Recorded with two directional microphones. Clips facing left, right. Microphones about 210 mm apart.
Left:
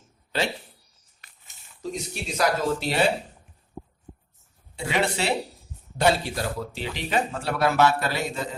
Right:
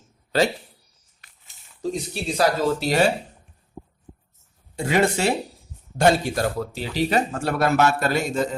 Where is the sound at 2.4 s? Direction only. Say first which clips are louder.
Right 3 dB; 40° right (ahead or behind).